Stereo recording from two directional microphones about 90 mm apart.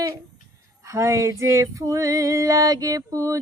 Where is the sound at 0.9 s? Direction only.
35° right (ahead or behind).